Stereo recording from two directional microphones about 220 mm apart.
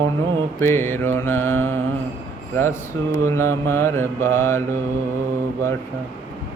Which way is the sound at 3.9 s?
10° left (ahead or behind).